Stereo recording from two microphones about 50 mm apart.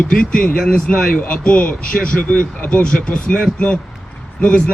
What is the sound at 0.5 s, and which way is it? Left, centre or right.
Speech, centre.